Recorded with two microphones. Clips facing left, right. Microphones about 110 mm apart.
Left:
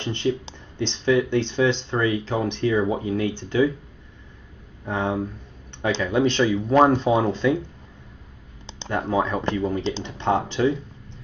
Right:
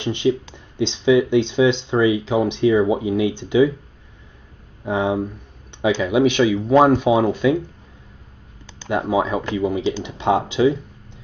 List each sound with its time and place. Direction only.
0.0 s speech: 15° right (ahead or behind)
4.8 s speech: 15° right (ahead or behind)
8.8 s speech: 15° right (ahead or behind)